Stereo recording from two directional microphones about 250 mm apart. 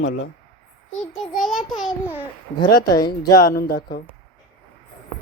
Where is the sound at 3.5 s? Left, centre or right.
Left.